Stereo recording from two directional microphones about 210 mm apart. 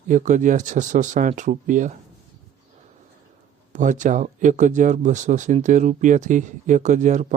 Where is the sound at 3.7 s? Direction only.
35° right (ahead or behind).